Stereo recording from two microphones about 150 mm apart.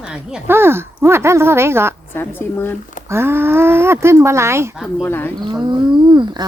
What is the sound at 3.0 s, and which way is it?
Speech, 15° right (ahead or behind).